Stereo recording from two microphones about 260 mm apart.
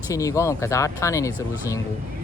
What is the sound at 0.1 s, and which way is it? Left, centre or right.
Speech, centre.